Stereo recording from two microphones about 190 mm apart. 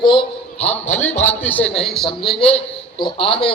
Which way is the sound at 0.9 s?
10° left (ahead or behind).